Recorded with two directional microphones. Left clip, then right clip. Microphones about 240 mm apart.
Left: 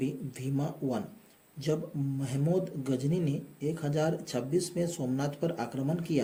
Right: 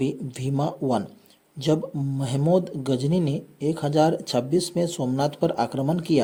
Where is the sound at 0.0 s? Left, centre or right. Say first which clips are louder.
Right 8 dB; right.